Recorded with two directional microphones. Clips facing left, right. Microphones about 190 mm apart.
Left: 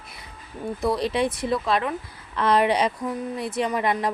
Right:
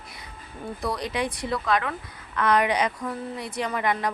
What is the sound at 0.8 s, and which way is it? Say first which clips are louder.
A woman's voice: left 5 dB; 25° left (ahead or behind).